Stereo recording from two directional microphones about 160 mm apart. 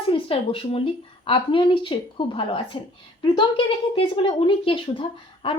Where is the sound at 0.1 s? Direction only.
35° left (ahead or behind).